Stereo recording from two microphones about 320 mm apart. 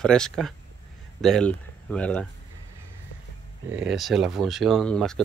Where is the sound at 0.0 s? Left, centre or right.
Centre.